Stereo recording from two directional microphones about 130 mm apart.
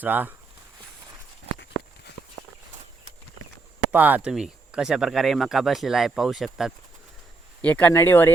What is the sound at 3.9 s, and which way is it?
Speech, 15° right (ahead or behind).